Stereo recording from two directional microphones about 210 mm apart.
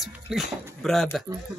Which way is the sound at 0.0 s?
Centre (ahead or behind).